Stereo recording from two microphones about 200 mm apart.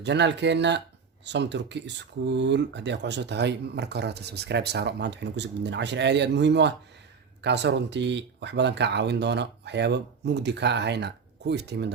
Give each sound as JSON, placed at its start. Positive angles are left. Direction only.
{"t": 0.0, "sound": "speech", "side_deg": -60}